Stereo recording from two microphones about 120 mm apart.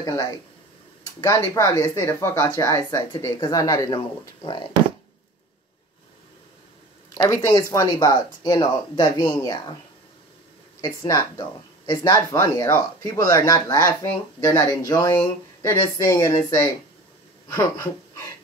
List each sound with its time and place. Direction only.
0.0 s speech: 30° left (ahead or behind)
7.2 s speech: 25° left (ahead or behind)
10.8 s speech: 30° left (ahead or behind)